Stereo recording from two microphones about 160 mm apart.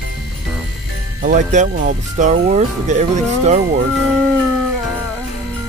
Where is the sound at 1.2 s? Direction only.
55° right (ahead or behind).